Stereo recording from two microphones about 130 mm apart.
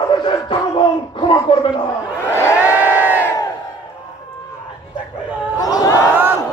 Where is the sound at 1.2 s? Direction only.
40° left (ahead or behind).